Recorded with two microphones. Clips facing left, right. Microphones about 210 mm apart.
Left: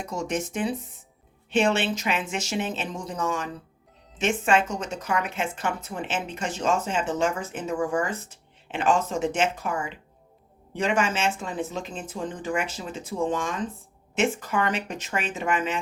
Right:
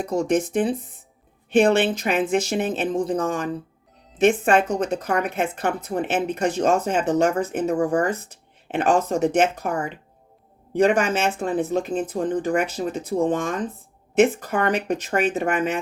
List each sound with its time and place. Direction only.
0.0 s speech: 55° right (ahead or behind)
7.6 s speech: 40° right (ahead or behind)
8.6 s speech: 55° right (ahead or behind)
9.6 s speech: 40° right (ahead or behind)
10.8 s speech: 55° right (ahead or behind)